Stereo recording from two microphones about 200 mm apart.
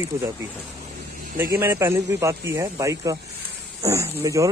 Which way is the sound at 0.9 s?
50° right (ahead or behind).